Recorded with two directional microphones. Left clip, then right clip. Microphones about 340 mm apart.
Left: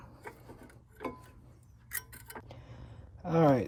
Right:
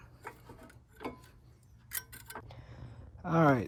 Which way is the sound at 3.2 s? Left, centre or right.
Centre.